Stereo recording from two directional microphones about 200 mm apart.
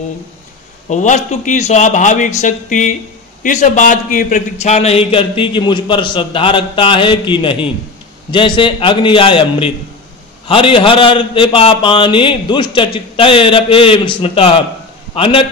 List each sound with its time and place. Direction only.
0.8 s a man's voice: 35° left (ahead or behind)